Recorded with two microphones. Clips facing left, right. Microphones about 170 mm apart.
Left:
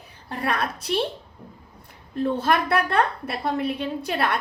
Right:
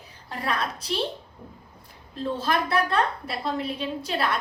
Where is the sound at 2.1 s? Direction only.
60° left (ahead or behind).